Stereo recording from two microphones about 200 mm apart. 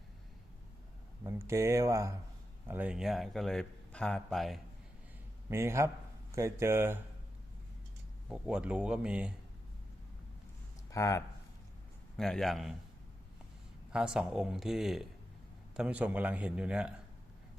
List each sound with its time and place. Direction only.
1.2 s speech: 15° right (ahead or behind)
5.5 s speech: 15° right (ahead or behind)
8.3 s speech: 5° right (ahead or behind)
10.9 s speech: 15° left (ahead or behind)
12.1 s speech: centre (ahead or behind)
13.9 s speech: 5° right (ahead or behind)